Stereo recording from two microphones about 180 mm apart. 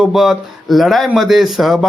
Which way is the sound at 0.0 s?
Centre (ahead or behind).